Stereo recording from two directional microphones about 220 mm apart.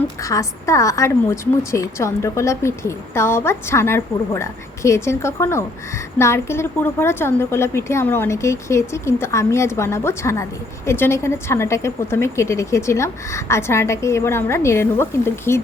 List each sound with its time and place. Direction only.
0.2 s a woman's voice: 15° left (ahead or behind)